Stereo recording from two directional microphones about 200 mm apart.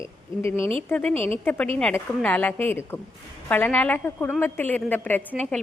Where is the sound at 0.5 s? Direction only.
30° right (ahead or behind).